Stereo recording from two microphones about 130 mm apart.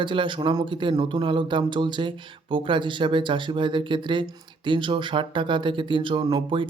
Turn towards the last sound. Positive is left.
turn(degrees=-40)  # may be behind; listen again after turning